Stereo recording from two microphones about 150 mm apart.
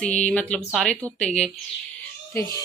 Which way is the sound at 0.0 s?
10° left (ahead or behind).